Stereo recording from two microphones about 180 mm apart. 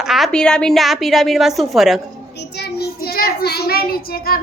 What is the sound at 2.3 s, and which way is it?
A child's voice, 65° left (ahead or behind).